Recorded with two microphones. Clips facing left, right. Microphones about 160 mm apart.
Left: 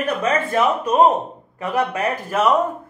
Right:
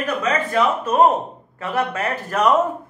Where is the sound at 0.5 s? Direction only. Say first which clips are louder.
Even; 15° left (ahead or behind).